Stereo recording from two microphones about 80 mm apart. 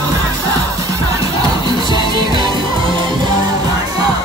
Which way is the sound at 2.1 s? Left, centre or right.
Right.